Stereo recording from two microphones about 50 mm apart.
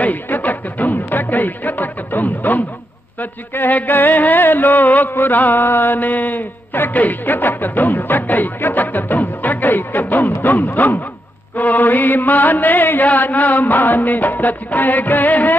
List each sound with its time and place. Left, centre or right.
0.0 s music: left